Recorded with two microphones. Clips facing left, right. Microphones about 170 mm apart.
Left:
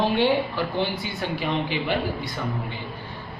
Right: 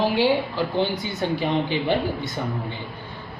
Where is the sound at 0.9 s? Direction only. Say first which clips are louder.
Right 3 dB; 20° right (ahead or behind).